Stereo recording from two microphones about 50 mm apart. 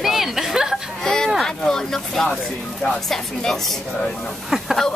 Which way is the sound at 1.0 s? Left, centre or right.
Centre.